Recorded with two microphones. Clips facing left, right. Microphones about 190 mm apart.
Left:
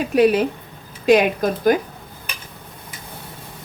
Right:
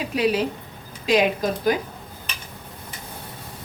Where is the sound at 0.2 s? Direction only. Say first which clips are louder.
Left 6 dB; 55° left (ahead or behind).